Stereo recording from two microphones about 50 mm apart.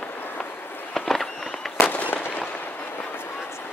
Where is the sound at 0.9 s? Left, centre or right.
Centre.